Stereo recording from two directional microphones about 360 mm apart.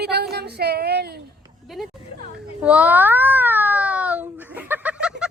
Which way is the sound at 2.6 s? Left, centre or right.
Centre.